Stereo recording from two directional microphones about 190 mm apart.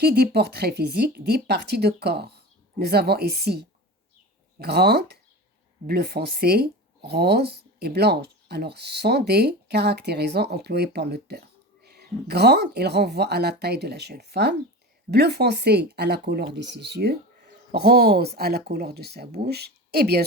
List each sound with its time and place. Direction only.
0.0 s speech: 55° right (ahead or behind)